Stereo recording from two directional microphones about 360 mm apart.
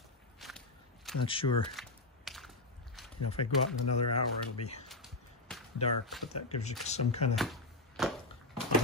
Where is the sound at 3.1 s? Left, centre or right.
Left.